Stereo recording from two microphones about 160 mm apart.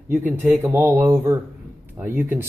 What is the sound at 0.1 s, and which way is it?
Speech, 10° right (ahead or behind).